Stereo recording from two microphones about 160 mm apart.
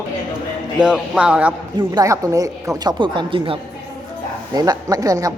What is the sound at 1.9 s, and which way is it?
Speech, 20° right (ahead or behind).